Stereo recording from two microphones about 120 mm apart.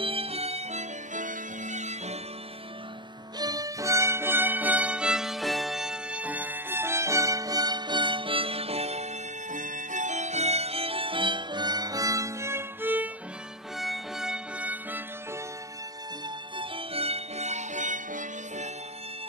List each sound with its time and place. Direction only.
0.0 s music: 55° right (ahead or behind); by 2.1 s 75° right (ahead or behind)
3.3 s music: 30° right (ahead or behind); by 13.1 s 15° right (ahead or behind)
13.7 s music: centre (ahead or behind)
16.5 s music: 50° right (ahead or behind); by 18.7 s 90° right